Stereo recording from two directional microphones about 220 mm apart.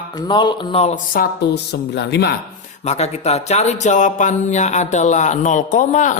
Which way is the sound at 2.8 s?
30° left (ahead or behind).